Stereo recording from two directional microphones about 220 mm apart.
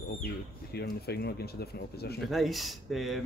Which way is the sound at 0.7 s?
45° left (ahead or behind).